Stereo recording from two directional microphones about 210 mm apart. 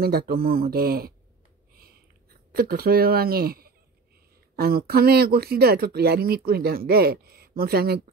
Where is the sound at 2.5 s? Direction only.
45° right (ahead or behind).